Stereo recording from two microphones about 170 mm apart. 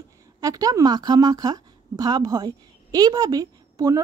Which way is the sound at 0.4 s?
20° right (ahead or behind).